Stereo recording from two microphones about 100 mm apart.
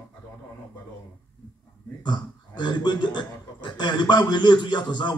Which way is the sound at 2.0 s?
50° left (ahead or behind).